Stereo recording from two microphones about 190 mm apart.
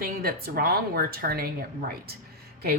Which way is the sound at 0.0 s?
50° right (ahead or behind).